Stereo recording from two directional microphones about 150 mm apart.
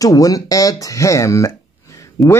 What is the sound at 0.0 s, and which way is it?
Speech, 25° left (ahead or behind).